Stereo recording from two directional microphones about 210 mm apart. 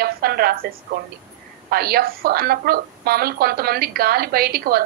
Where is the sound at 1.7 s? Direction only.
45° right (ahead or behind).